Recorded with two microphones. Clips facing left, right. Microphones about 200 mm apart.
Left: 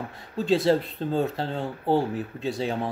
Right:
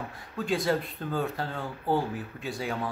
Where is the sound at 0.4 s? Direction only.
25° left (ahead or behind).